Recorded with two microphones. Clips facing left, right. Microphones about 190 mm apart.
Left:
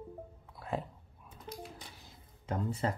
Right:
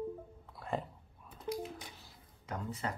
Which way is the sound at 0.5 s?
Centre (ahead or behind).